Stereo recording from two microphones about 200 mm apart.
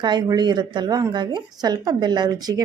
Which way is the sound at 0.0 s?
20° right (ahead or behind).